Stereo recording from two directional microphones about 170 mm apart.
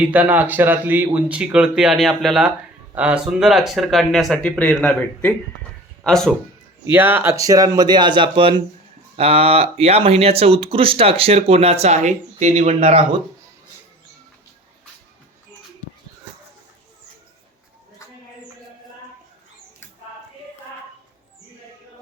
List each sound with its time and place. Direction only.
0.0 s speech: 10° right (ahead or behind)
6.8 s speech: 10° right (ahead or behind); by 13.1 s 35° right (ahead or behind)